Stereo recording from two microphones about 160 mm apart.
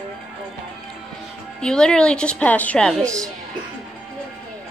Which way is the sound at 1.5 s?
5° left (ahead or behind).